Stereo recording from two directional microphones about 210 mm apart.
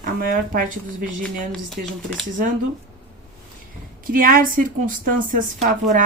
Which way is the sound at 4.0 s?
40° right (ahead or behind).